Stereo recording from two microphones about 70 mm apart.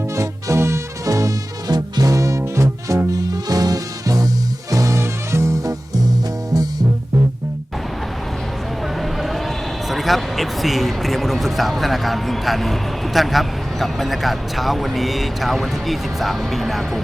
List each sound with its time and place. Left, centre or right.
0.2 s music: right
4.7 s music: right
9.0 s a sound: centre
9.9 s a man's voice: centre